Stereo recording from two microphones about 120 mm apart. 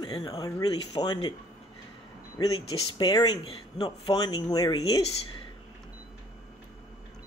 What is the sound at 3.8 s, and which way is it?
Speech, 35° left (ahead or behind).